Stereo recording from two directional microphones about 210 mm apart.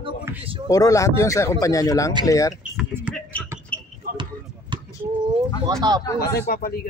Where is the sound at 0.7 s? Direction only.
15° left (ahead or behind).